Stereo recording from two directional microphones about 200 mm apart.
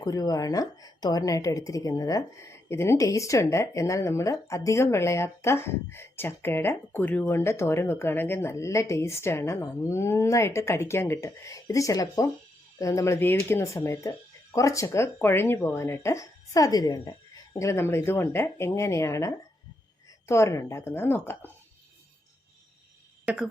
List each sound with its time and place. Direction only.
0.0 s a woman's voice: 20° left (ahead or behind)
23.2 s speech: 5° right (ahead or behind)